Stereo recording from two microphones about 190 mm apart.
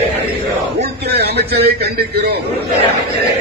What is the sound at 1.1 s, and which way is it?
A man's voice, 60° right (ahead or behind).